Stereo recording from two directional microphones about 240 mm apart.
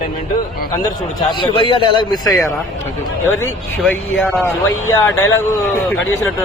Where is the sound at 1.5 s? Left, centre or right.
Left.